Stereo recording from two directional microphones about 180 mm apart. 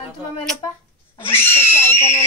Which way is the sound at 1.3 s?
10° left (ahead or behind).